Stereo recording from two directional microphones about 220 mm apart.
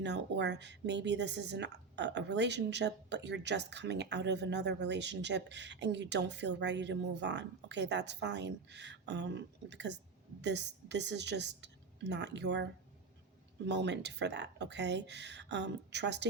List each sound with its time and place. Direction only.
0.0 s a woman's voice: 50° right (ahead or behind)
13.7 s speech: 50° right (ahead or behind)